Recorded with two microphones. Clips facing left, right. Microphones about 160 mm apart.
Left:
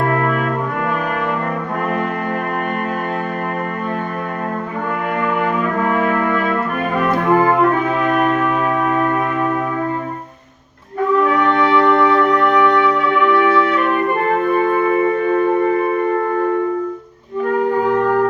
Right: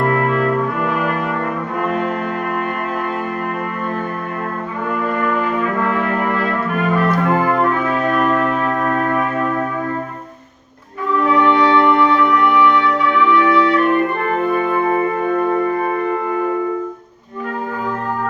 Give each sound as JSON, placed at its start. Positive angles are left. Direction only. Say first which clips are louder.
{"t": 11.9, "sound": "music", "louder": "left 1 dB", "side_deg": 45}